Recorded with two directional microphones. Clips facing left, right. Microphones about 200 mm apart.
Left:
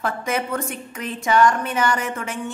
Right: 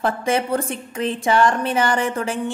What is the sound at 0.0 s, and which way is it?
A woman's voice, 30° right (ahead or behind).